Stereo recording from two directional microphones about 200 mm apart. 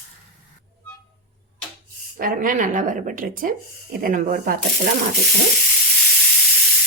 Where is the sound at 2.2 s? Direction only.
45° right (ahead or behind).